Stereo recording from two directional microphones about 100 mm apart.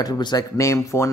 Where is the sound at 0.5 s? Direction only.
30° left (ahead or behind).